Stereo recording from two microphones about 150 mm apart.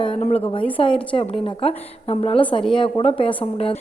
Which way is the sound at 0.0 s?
40° left (ahead or behind).